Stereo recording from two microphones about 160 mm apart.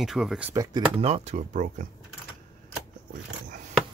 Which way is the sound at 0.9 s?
40° right (ahead or behind).